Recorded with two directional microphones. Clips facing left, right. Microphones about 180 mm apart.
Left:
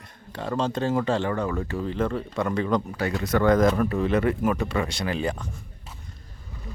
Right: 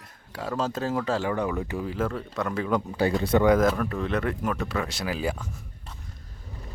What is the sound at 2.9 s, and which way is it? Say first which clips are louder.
Speech: right 3 dB; 30° right (ahead or behind).